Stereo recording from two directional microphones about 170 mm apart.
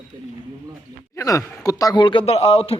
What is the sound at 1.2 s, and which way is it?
Speech, 20° left (ahead or behind).